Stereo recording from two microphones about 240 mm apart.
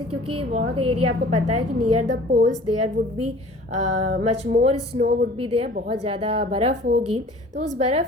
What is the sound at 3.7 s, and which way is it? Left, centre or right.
Speech, right.